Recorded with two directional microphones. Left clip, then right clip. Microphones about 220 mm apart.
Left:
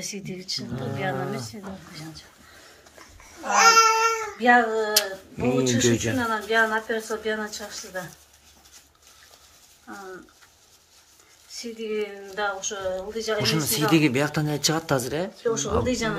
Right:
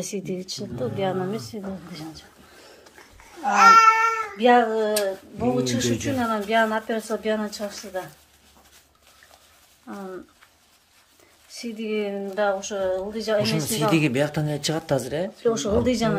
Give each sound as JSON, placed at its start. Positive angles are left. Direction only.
{"t": 0.0, "sound": "speech", "side_deg": -35}
{"t": 3.5, "sound": "babbling", "side_deg": 15}
{"t": 4.4, "sound": "speech", "side_deg": -40}
{"t": 9.9, "sound": "speech", "side_deg": -40}
{"t": 11.5, "sound": "speech", "side_deg": -35}
{"t": 13.4, "sound": "speech", "side_deg": -5}
{"t": 15.4, "sound": "speech", "side_deg": -40}